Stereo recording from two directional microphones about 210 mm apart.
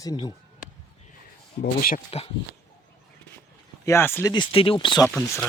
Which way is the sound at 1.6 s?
45° left (ahead or behind).